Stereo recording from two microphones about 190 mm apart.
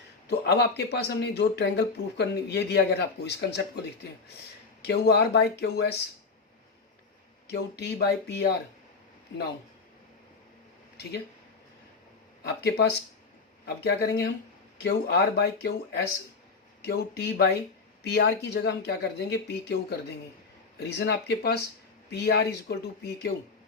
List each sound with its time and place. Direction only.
0.3 s speech: 60° left (ahead or behind)
4.8 s speech: 60° left (ahead or behind)
7.4 s speech: 60° left (ahead or behind)
12.4 s speech: 60° left (ahead or behind)
20.7 s speech: 60° left (ahead or behind)